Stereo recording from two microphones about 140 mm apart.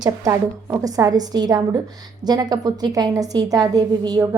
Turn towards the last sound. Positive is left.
turn(degrees=-25)  # may be behind; listen again after turning